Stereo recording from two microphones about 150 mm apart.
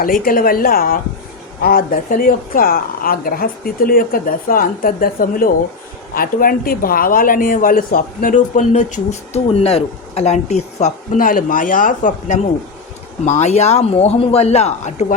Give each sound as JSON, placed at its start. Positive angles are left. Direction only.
{"t": 0.0, "sound": "a woman's voice", "side_deg": 70}
{"t": 11.2, "sound": "speech", "side_deg": 65}